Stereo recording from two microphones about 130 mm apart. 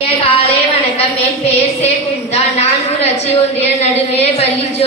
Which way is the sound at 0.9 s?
55° left (ahead or behind).